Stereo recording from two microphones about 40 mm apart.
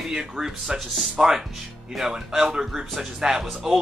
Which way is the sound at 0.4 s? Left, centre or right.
Centre.